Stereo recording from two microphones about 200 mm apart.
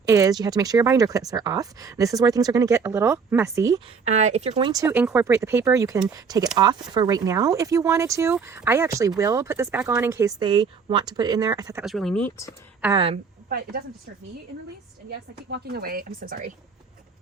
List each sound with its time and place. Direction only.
0.1 s speech: 15° right (ahead or behind)
4.1 s speech: 35° right (ahead or behind)
4.6 s speech: 15° right (ahead or behind)
11.8 s speech: centre (ahead or behind)
12.9 s speech: 25° right (ahead or behind)
13.5 s speech: 45° right (ahead or behind)
15.4 s speech: 55° right (ahead or behind)